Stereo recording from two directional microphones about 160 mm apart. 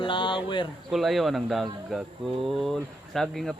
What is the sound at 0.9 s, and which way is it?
Speech, centre (ahead or behind).